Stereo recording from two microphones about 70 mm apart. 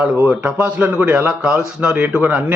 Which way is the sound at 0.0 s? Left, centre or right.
Centre.